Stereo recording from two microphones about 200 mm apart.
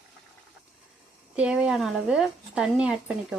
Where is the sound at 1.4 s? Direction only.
5° right (ahead or behind).